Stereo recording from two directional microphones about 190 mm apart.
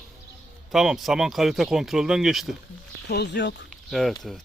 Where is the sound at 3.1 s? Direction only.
60° left (ahead or behind).